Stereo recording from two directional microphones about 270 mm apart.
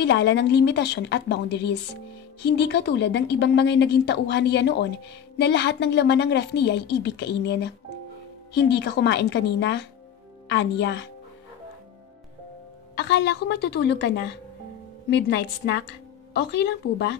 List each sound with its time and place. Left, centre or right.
0.0 s a woman's voice: left
12.9 s a woman's voice: left